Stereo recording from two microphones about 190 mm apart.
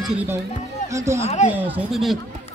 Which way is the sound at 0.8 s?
15° right (ahead or behind).